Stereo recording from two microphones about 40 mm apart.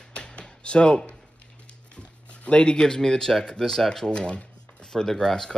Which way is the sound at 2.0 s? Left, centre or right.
Left.